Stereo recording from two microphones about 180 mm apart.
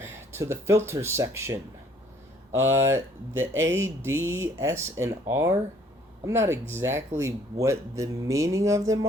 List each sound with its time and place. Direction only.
0.0 s speech: 15° right (ahead or behind)
2.7 s speech: 15° right (ahead or behind)